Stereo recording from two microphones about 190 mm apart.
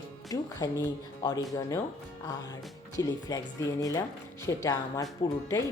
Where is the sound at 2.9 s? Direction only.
20° left (ahead or behind).